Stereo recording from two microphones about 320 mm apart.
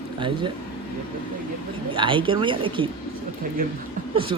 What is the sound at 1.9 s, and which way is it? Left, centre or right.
Speech, centre.